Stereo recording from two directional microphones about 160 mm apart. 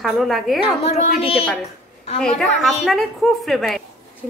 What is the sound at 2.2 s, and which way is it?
A woman's voice, centre (ahead or behind).